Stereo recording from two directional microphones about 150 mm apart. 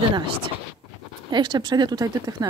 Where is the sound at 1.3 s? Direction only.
30° right (ahead or behind).